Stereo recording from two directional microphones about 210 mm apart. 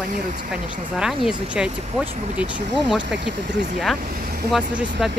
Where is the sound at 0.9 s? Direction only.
5° right (ahead or behind).